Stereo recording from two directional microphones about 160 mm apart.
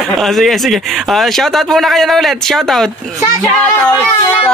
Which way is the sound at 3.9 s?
15° left (ahead or behind).